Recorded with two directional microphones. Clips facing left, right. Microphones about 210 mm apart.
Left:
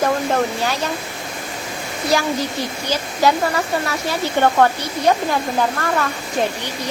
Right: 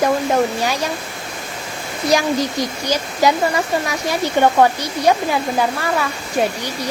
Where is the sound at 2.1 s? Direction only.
15° right (ahead or behind).